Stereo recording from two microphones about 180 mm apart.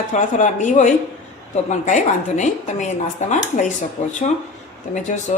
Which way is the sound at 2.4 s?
40° left (ahead or behind).